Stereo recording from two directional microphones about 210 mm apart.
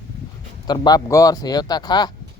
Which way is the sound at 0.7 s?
20° left (ahead or behind).